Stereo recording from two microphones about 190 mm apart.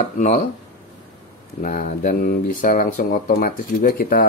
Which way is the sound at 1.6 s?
45° left (ahead or behind).